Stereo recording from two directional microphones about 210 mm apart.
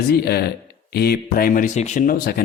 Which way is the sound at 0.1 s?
50° left (ahead or behind).